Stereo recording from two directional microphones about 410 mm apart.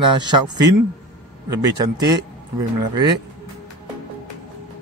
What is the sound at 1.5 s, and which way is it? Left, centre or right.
Speech, centre.